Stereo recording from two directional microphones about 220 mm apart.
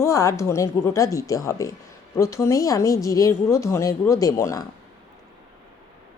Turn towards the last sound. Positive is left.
turn(degrees=15)  # may be behind; listen again after turning